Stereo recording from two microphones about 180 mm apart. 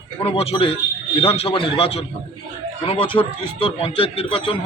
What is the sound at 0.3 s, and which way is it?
A man's voice, 30° left (ahead or behind).